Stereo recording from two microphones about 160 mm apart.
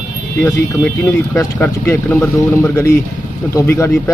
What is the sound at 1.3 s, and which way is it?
Speech, 10° left (ahead or behind).